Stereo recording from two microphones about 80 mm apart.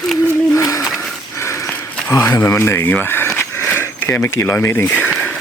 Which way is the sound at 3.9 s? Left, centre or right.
Left.